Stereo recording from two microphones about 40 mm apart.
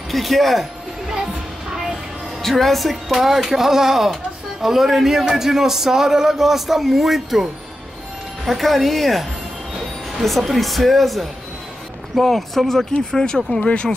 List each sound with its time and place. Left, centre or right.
0.1 s speech: centre
1.1 s music: centre
2.4 s speech: centre
8.5 s speech: centre
13.1 s speech: left